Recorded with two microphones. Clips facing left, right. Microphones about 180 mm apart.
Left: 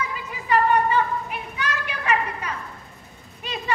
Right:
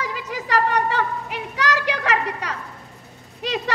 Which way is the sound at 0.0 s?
90° right.